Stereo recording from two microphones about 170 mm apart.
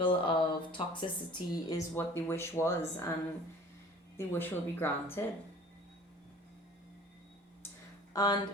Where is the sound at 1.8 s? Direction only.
15° left (ahead or behind).